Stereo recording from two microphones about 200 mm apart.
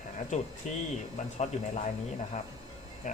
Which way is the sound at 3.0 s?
40° left (ahead or behind).